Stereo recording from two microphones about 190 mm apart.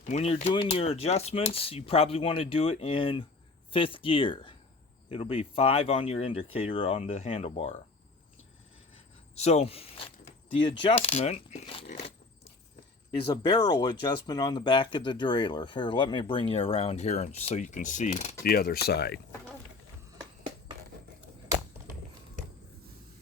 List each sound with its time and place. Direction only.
0.0 s speech: 35° left (ahead or behind)
9.4 s speech: 35° left (ahead or behind)
13.2 s speech: 25° left (ahead or behind); by 18.3 s 40° left (ahead or behind)
18.4 s speech: 55° left (ahead or behind)